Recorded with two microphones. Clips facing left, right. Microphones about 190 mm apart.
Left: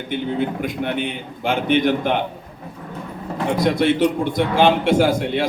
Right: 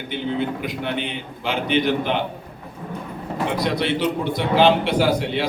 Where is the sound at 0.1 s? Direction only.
50° left (ahead or behind).